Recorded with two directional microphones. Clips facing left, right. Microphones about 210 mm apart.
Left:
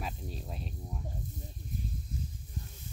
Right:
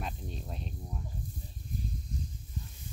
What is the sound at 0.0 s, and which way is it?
Snake, 5° left (ahead or behind).